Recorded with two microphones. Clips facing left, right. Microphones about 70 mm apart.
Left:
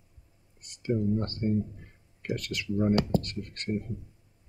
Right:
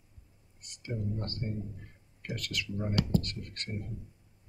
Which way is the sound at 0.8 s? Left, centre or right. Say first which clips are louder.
Left 9 dB; left.